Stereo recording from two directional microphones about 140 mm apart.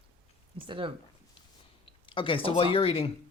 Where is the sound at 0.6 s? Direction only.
35° right (ahead or behind).